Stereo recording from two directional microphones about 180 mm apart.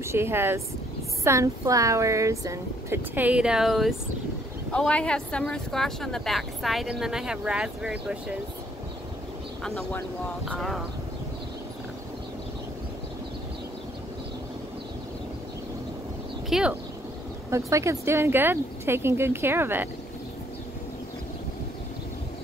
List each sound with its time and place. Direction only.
0.0 s speech: 15° right (ahead or behind)
9.6 s speech: centre (ahead or behind)
16.4 s speech: 5° right (ahead or behind)
17.5 s speech: 15° right (ahead or behind)